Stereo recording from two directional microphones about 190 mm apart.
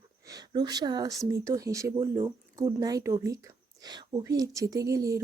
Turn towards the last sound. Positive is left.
turn(degrees=-15)  # may be behind; listen again after turning